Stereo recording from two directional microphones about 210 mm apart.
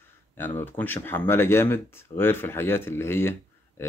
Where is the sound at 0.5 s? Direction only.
10° left (ahead or behind).